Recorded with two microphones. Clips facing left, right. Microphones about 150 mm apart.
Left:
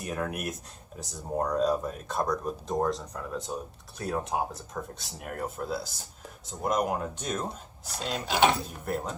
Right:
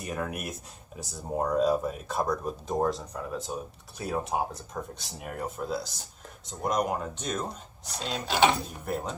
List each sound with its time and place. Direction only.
0.0 s speech: centre (ahead or behind)